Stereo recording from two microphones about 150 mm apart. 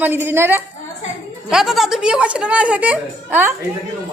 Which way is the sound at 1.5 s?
5° right (ahead or behind).